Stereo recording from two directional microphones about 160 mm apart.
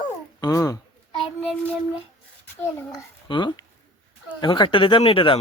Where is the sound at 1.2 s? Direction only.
Centre (ahead or behind).